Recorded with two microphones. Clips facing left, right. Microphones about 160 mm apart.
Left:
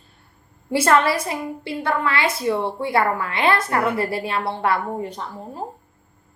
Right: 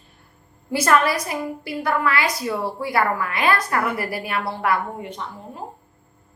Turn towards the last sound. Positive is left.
turn(degrees=35)  # may be behind; listen again after turning